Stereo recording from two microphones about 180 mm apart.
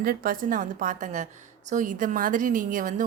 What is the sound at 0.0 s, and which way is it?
A woman's voice, 55° right (ahead or behind).